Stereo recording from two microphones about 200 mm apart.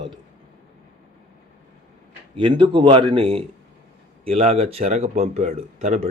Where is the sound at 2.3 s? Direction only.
25° right (ahead or behind).